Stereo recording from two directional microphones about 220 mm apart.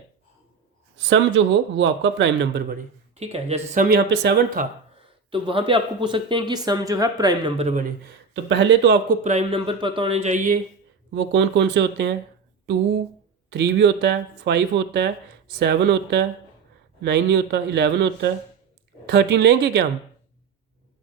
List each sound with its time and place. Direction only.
0.9 s a man's voice: 55° right (ahead or behind)
5.3 s speech: 25° right (ahead or behind)
8.0 s a man's voice: 55° right (ahead or behind)
9.0 s speech: 30° right (ahead or behind)
11.1 s a man's voice: 55° right (ahead or behind)
13.5 s a man's voice: 50° right (ahead or behind)